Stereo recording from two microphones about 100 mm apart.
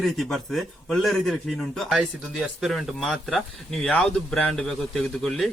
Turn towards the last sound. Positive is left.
turn(degrees=5)  # may be behind; listen again after turning